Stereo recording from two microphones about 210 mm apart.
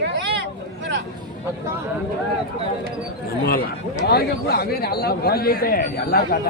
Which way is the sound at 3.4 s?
45° left (ahead or behind).